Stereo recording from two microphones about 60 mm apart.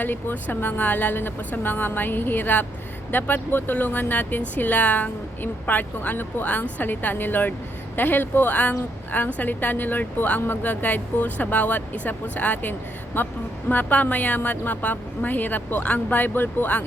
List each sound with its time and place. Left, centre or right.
0.0 s speech: left
13.1 s speech: left